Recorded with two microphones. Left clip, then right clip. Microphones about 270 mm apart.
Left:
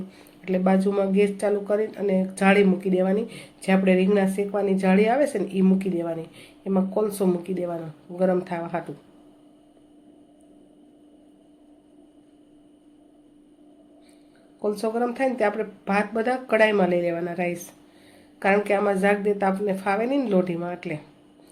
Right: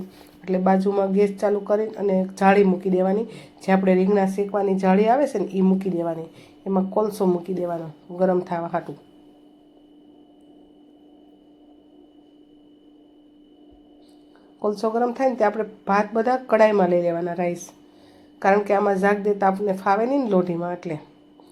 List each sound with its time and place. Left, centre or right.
0.4 s speech: centre
14.6 s speech: centre